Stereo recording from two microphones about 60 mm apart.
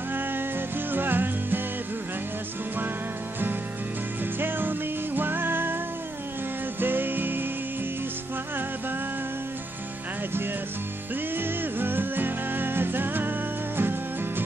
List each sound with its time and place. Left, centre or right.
0.9 s music: right
4.4 s music: right
6.8 s music: right
11.3 s music: right